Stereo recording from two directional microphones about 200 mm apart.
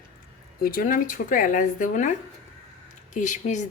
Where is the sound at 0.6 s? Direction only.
45° left (ahead or behind).